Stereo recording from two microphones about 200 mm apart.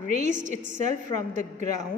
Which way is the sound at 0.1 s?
35° right (ahead or behind).